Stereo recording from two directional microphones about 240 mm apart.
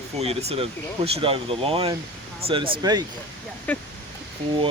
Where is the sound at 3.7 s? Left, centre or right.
Centre.